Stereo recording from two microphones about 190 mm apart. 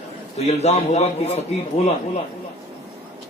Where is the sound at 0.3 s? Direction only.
35° left (ahead or behind).